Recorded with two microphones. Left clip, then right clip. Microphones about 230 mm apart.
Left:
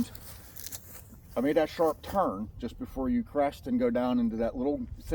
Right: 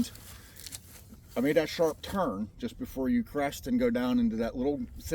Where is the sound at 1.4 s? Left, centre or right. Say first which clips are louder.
Even; right.